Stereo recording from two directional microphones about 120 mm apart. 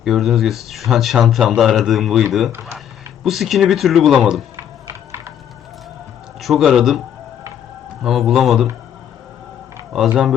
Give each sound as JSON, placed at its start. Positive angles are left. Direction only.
{"t": 0.0, "sound": "speech", "side_deg": 0}
{"t": 3.2, "sound": "speech", "side_deg": 0}
{"t": 4.5, "sound": "music", "side_deg": -20}
{"t": 6.4, "sound": "speech", "side_deg": 0}
{"t": 8.0, "sound": "speech", "side_deg": 0}
{"t": 9.9, "sound": "speech", "side_deg": -5}